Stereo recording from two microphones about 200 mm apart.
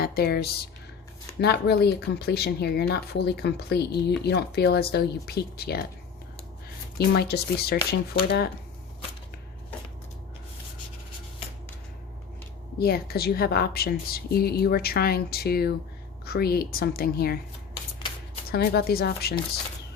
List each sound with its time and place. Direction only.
0.0 s a woman's voice: 50° left (ahead or behind)
7.2 s a woman's voice: 50° left (ahead or behind)
12.8 s a woman's voice: 50° left (ahead or behind)
18.5 s a woman's voice: 50° left (ahead or behind)